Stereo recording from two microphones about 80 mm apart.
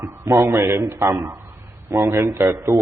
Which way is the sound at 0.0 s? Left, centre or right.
Right.